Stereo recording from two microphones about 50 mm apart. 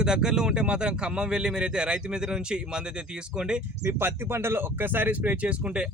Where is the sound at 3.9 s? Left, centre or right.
Right.